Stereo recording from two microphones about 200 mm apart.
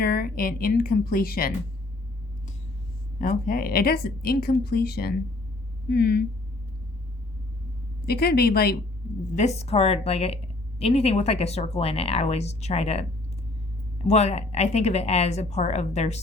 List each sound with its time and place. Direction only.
0.0 s a woman's voice: 50° left (ahead or behind)
3.2 s a woman's voice: 45° left (ahead or behind)
8.0 s a woman's voice: 50° left (ahead or behind)
9.3 s speech: 35° left (ahead or behind)
14.1 s speech: 35° left (ahead or behind)